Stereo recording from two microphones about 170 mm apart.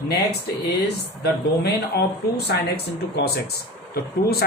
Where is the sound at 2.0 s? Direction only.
70° left (ahead or behind).